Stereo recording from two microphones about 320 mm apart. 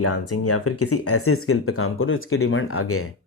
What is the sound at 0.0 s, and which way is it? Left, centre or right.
Speech, left.